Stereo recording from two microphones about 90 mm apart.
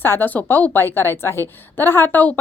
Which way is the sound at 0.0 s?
25° left (ahead or behind).